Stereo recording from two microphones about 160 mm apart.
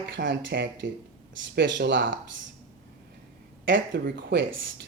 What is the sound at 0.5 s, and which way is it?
Speech, 90° right.